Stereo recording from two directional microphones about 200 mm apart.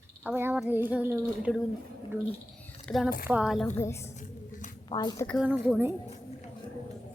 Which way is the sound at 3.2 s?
5° right (ahead or behind).